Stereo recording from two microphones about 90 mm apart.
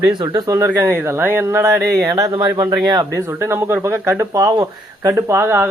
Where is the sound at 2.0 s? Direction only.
40° right (ahead or behind).